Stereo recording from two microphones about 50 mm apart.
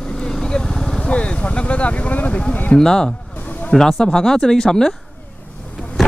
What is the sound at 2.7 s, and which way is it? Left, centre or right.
Speech, centre.